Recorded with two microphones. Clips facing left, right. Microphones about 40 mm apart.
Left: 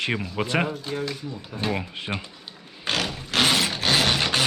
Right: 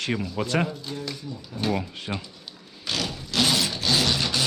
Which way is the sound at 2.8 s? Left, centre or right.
Left.